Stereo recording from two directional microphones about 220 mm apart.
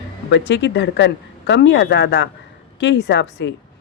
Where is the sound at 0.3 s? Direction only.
55° left (ahead or behind).